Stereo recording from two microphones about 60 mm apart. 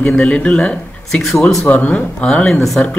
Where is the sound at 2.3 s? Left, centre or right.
Left.